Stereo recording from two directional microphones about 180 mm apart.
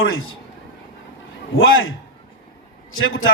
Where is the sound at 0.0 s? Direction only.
90° left.